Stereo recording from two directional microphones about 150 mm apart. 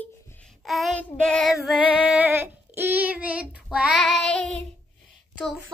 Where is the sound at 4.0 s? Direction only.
5° left (ahead or behind).